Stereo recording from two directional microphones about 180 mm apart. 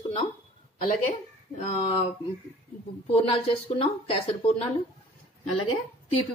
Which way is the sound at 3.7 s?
30° left (ahead or behind).